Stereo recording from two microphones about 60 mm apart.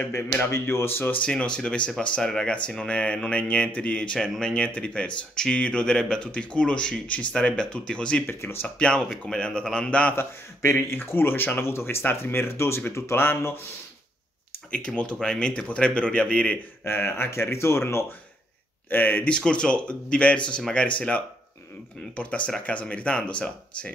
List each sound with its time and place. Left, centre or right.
0.5 s speech: left
1.2 s speech: centre
8.3 s speech: left
8.6 s speech: centre
10.1 s speech: left
14.7 s speech: centre
16.8 s speech: left
18.9 s speech: left
19.2 s speech: centre